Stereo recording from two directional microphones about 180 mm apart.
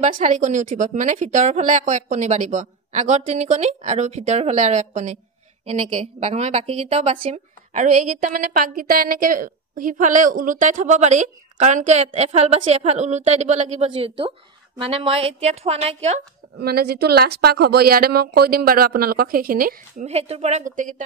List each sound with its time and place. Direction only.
0.0 s a woman's voice: 45° right (ahead or behind)
16.5 s a woman's voice: 60° right (ahead or behind)
20.1 s a woman's voice: 35° right (ahead or behind)